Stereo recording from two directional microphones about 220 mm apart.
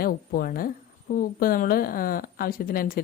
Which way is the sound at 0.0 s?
40° left (ahead or behind).